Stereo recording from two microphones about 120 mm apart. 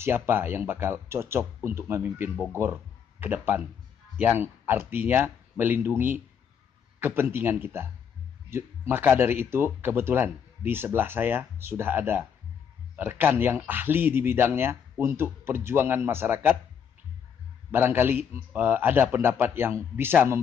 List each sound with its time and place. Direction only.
0.0 s speech: 20° right (ahead or behind)
17.6 s speech: 20° right (ahead or behind)